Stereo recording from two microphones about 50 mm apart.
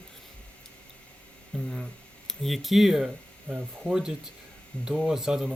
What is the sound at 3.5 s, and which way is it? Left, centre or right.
Speech, centre.